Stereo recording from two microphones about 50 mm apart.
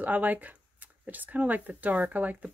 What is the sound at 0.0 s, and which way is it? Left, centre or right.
Speech, right.